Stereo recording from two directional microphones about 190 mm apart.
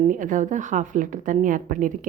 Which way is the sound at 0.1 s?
45° right (ahead or behind).